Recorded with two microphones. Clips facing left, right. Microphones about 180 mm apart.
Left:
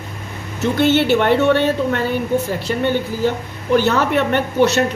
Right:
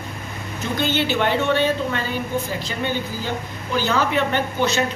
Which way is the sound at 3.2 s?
65° left (ahead or behind).